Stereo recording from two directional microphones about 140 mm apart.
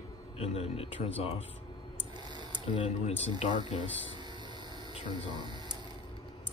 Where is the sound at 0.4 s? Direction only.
45° left (ahead or behind).